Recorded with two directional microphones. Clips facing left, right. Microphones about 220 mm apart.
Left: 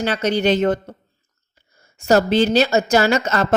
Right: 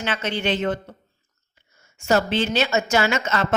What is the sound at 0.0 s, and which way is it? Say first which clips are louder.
A woman's voice: left 7 dB; 40° left (ahead or behind).